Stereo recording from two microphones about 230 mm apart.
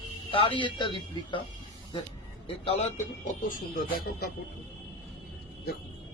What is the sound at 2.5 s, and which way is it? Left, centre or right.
Speech, left.